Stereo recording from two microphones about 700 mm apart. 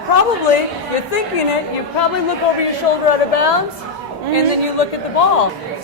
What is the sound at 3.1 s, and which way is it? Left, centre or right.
Speech, left.